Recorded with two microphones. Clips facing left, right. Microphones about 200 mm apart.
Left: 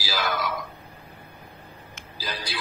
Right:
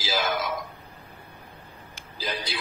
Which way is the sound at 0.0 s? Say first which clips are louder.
Right 1 dB; 20° right (ahead or behind).